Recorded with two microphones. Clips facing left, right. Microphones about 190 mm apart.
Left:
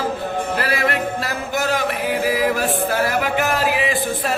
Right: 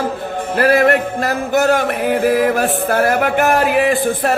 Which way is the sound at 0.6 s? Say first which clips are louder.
Right 12 dB; 50° right (ahead or behind).